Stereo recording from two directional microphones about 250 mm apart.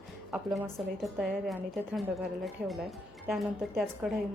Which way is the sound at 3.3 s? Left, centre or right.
Centre.